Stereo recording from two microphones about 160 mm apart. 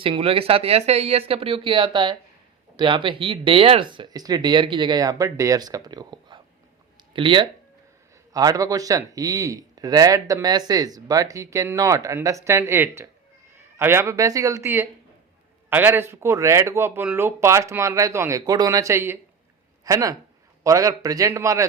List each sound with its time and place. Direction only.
0.0 s speech: 35° right (ahead or behind); by 21.7 s 20° right (ahead or behind)